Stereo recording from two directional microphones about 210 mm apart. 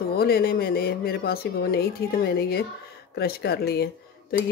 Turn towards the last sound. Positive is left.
turn(degrees=50)  # may be behind; listen again after turning